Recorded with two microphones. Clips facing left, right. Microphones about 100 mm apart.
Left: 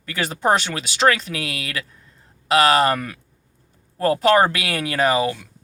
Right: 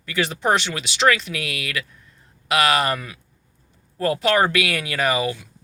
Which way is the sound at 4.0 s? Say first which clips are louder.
Left 3 dB; 35° left (ahead or behind).